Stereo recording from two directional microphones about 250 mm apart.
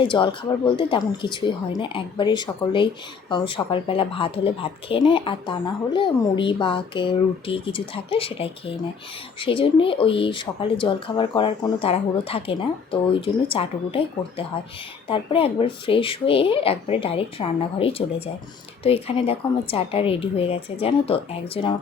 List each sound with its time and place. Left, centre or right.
0.0 s speech: centre